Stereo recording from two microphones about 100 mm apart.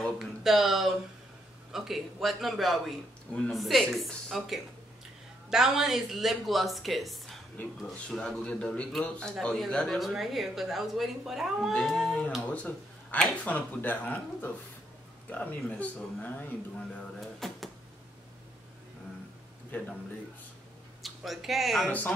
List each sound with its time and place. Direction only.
0.0 s a man's voice: centre (ahead or behind)
12.4 s a man's voice: 15° left (ahead or behind)
17.4 s speech: centre (ahead or behind)
19.7 s a man's voice: 15° left (ahead or behind)
21.0 s speech: centre (ahead or behind)